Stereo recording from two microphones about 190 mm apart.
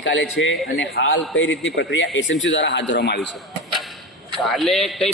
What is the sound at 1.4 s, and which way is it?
A man's voice, 80° left.